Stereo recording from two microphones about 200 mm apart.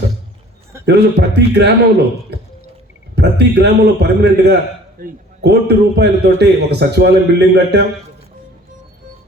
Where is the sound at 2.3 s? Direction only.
55° right (ahead or behind).